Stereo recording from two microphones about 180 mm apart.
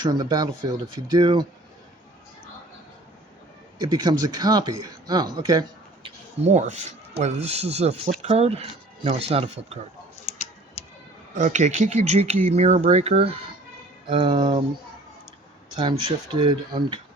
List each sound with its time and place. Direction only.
0.0 s speech: 20° right (ahead or behind)
3.8 s speech: 20° right (ahead or behind)
6.4 s speech: 40° right (ahead or behind)
11.3 s speech: 40° right (ahead or behind); by 14.6 s 25° right (ahead or behind)
15.8 s speech: 25° right (ahead or behind)